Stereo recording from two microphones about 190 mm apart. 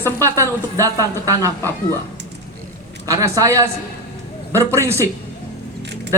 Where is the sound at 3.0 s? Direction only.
20° right (ahead or behind).